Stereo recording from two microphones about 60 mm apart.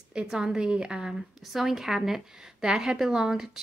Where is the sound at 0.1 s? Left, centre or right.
Centre.